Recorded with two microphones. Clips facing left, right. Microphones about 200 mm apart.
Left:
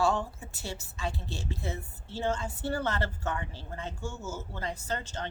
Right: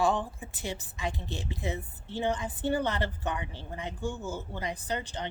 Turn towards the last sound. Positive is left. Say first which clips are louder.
# right 1 dB
turn(degrees=-15)  # may be behind; listen again after turning